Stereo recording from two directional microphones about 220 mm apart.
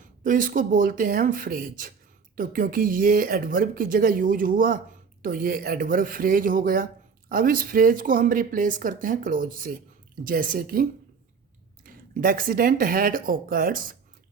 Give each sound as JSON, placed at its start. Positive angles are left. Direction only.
{"t": 0.0, "sound": "speech", "side_deg": -35}
{"t": 11.9, "sound": "speech", "side_deg": -40}